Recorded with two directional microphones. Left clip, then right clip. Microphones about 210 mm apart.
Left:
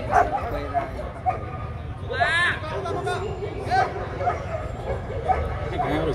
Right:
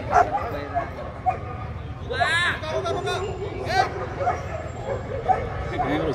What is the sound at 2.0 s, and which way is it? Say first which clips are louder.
Vehicle: left 1 dB; 25° right (ahead or behind).